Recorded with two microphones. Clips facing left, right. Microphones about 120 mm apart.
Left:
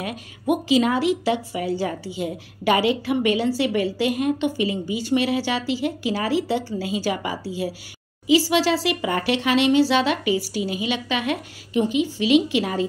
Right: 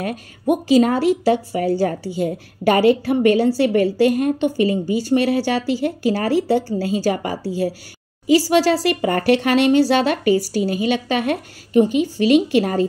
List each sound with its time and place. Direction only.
0.0 s a woman's voice: 45° right (ahead or behind)